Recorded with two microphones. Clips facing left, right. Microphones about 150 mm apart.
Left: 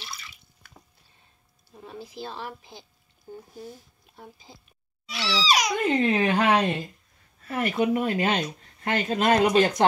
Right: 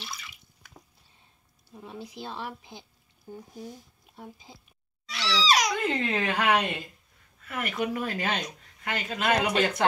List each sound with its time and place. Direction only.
2.0 s a woman's voice: 20° right (ahead or behind)
3.3 s speech: 5° left (ahead or behind)
5.1 s babbling: 5° left (ahead or behind)
5.7 s a child's voice: 20° left (ahead or behind)